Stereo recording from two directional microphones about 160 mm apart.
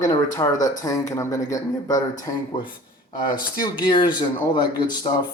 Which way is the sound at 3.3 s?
25° left (ahead or behind).